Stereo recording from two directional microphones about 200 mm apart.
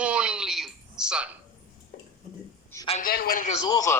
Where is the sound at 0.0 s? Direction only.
5° right (ahead or behind).